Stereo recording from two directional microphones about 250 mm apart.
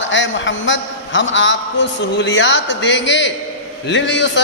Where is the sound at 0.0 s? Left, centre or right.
Left.